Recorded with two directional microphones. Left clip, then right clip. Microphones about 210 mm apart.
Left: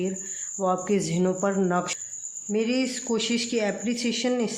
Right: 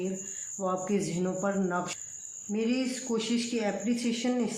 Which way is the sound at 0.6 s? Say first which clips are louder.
Left 6 dB; 45° left (ahead or behind).